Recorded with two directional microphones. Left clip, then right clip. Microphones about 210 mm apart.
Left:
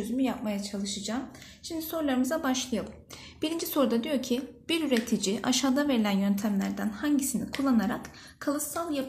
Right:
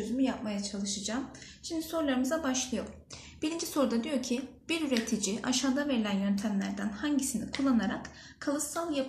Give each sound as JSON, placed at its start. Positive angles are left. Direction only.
{"t": 0.2, "sound": "a woman's voice", "side_deg": 40}